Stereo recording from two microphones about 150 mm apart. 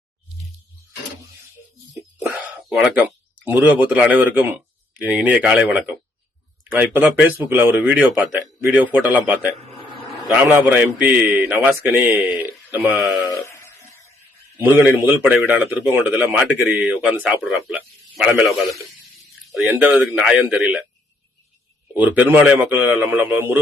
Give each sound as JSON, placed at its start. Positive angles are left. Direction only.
{"t": 2.2, "sound": "speech", "side_deg": -5}
{"t": 13.4, "sound": "a sound", "side_deg": 20}
{"t": 14.6, "sound": "speech", "side_deg": -15}
{"t": 21.9, "sound": "speech", "side_deg": -10}